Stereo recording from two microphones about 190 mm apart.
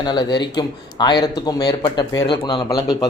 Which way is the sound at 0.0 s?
20° left (ahead or behind).